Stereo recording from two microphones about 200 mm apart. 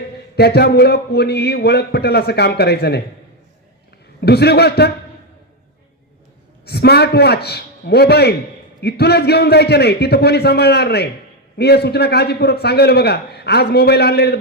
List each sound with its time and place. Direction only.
0.3 s a man's voice: 55° left (ahead or behind)
4.2 s a man's voice: 55° left (ahead or behind)
6.7 s a man's voice: 55° left (ahead or behind)